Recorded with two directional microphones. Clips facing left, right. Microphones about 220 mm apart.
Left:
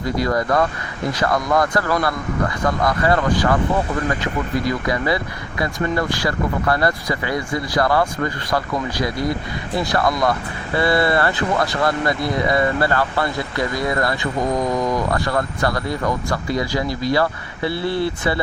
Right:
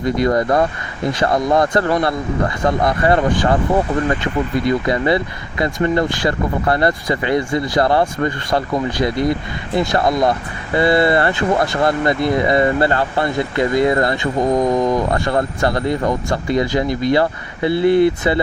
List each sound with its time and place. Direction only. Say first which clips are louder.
0.0 s speech: right 4 dB; 20° right (ahead or behind)